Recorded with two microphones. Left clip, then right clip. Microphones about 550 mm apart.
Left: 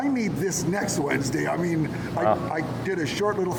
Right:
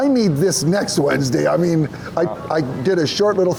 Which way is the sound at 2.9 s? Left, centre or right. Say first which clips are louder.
Right 9 dB; right.